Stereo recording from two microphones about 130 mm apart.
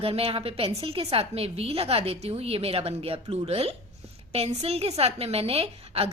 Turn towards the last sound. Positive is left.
turn(degrees=-50)  # may be behind; listen again after turning